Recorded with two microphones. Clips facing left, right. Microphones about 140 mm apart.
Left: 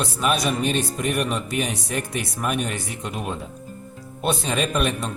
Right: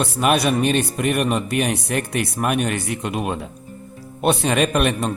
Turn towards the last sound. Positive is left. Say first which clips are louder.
# right 4 dB
turn(degrees=-60)  # may be behind; listen again after turning